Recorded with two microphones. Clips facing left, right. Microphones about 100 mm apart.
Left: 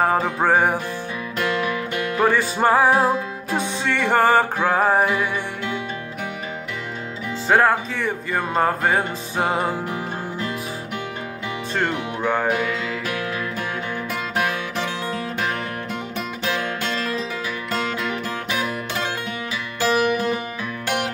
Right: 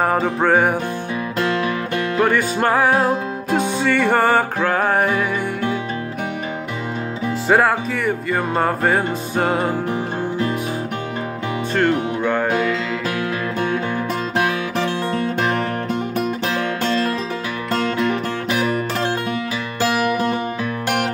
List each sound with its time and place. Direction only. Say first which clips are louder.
0.0 s music: right 1 dB; centre (ahead or behind)
2.1 s music: right 1 dB; centre (ahead or behind)
7.4 s music: right 1 dB; 5° right (ahead or behind)
11.7 s music: right 6 dB; centre (ahead or behind)
17.6 s music: right 7 dB; 50° right (ahead or behind)
20.1 s music: right 2 dB; 50° right (ahead or behind)